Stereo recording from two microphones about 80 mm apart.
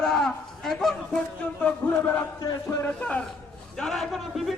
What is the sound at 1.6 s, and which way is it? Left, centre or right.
Speech, left.